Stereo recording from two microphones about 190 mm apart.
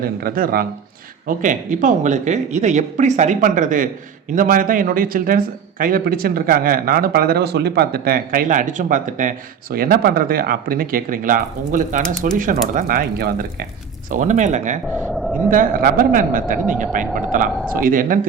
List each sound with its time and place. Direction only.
0.0 s speech: 50° right (ahead or behind)
14.1 s speech: 40° right (ahead or behind)